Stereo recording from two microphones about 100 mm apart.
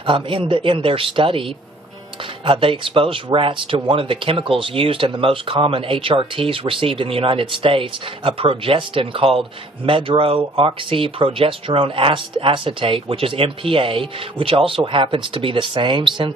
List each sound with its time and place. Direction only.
0.0 s speech: 60° right (ahead or behind)
2.4 s speech: 60° right (ahead or behind)